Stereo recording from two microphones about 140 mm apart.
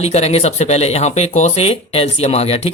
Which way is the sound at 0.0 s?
50° left (ahead or behind).